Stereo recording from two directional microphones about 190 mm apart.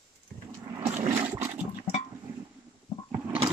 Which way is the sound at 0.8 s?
35° right (ahead or behind).